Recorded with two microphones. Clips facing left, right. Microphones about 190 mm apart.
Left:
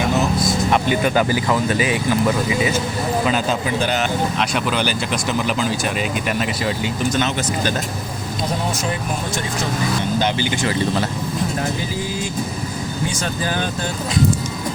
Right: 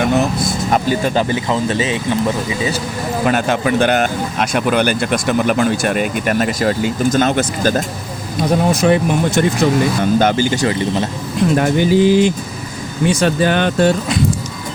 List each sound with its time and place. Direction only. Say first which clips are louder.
0.4 s vehicle: right 1 dB; 40° right (ahead or behind)
1.1 s speech: right 1 dB; 25° right (ahead or behind)
3.2 s speech: right 4 dB; 60° right (ahead or behind)
8.4 s speech: right 10 dB; 60° right (ahead or behind)
10.0 s speech: right 6 dB; 50° right (ahead or behind)
10.7 s speech: right 2 dB; 25° right (ahead or behind)
11.5 s speech: right 11 dB; 75° right (ahead or behind)